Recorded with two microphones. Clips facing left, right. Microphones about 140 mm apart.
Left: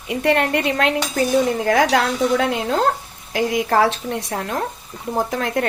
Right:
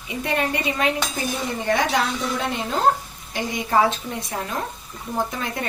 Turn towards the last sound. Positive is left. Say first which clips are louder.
# left 7 dB
turn(degrees=80)